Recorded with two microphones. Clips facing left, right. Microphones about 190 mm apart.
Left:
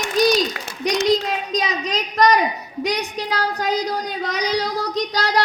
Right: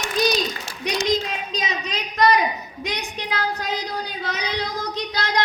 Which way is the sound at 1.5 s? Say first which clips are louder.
Left 6 dB; 35° left (ahead or behind).